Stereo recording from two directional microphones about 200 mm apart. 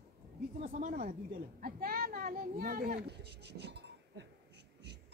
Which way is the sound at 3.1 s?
55° right (ahead or behind).